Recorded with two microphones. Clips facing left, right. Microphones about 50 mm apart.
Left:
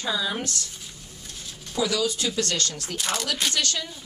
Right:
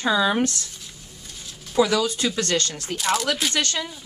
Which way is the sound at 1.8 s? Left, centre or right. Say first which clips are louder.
Right 3 dB; right.